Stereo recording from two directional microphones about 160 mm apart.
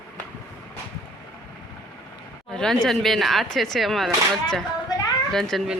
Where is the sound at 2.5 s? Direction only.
5° left (ahead or behind).